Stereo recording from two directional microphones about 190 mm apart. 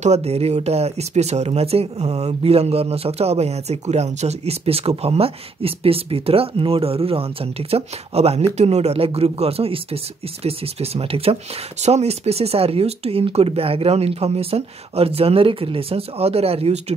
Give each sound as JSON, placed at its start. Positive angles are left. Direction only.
{"t": 0.0, "sound": "speech", "side_deg": -35}